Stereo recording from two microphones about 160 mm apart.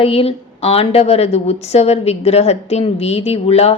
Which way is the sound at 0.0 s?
35° left (ahead or behind).